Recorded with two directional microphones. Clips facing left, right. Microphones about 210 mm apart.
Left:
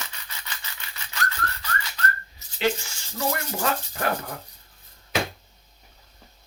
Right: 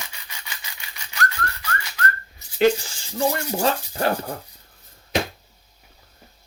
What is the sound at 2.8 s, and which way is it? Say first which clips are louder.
Speech: right 5 dB; 30° right (ahead or behind).